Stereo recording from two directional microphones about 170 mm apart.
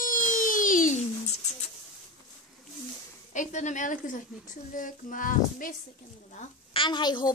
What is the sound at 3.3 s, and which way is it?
Speech, 45° left (ahead or behind).